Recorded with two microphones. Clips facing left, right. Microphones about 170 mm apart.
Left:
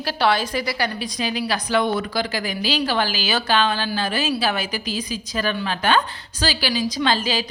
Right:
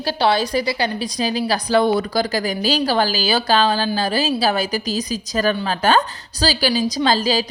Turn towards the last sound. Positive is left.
turn(degrees=-35)  # may be behind; listen again after turning